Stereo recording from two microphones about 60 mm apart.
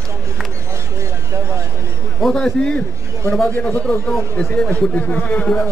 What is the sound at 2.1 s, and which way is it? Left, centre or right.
Speech, centre.